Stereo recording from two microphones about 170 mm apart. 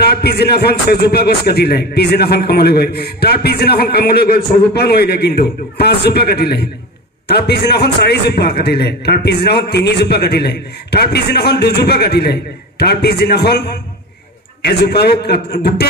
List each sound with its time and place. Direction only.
0.0 s a man's voice: 70° left (ahead or behind)